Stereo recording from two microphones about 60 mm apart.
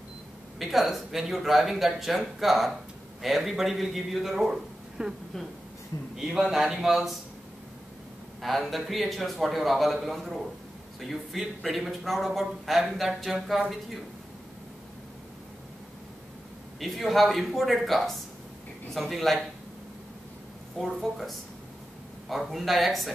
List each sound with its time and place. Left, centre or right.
0.6 s a man's voice: centre
6.1 s a man's voice: centre
8.4 s a man's voice: centre
16.8 s a man's voice: centre
20.7 s a man's voice: centre